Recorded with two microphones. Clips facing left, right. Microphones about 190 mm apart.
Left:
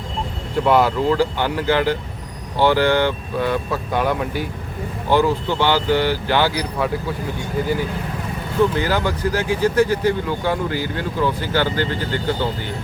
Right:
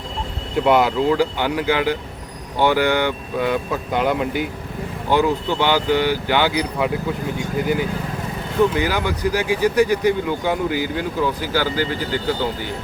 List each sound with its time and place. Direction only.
0.6 s speech: 15° right (ahead or behind)
8.7 s speech: 15° right (ahead or behind)